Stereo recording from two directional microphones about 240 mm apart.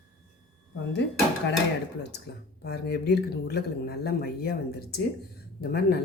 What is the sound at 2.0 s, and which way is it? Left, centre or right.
A woman's voice, left.